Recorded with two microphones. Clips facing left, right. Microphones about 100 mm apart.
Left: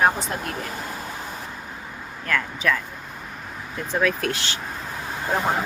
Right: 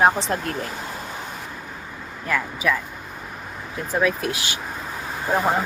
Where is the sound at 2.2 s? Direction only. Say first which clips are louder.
Right 1 dB; 10° right (ahead or behind).